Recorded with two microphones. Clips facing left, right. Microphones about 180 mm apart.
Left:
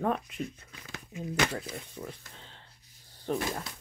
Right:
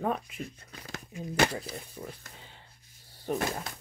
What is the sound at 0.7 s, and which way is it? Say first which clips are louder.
Speech: right 4 dB; 40° right (ahead or behind).